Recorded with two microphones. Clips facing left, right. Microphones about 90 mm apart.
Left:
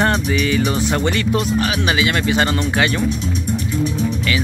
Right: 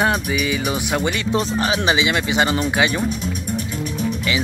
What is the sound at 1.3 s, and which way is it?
Speech, 30° right (ahead or behind).